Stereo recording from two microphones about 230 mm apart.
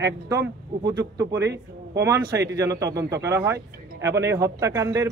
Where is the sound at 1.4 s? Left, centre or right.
Right.